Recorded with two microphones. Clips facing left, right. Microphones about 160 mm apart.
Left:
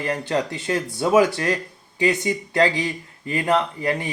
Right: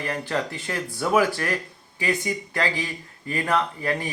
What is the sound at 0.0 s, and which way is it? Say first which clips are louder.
Speech: left 4 dB; 20° left (ahead or behind).